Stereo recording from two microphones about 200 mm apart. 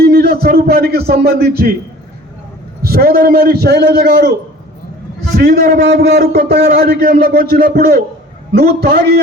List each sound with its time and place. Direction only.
0.0 s speech: 50° right (ahead or behind)
2.8 s a man's voice: 50° right (ahead or behind)
5.4 s a man's voice: 45° right (ahead or behind)